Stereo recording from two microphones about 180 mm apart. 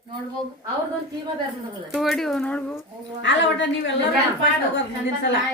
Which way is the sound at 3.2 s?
90° left.